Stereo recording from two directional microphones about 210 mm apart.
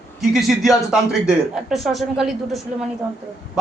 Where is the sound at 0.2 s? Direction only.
Centre (ahead or behind).